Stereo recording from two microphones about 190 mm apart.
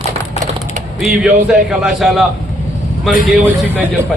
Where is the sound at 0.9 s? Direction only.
5° right (ahead or behind).